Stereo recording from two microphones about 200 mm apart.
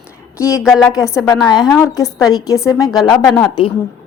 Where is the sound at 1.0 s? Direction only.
15° left (ahead or behind).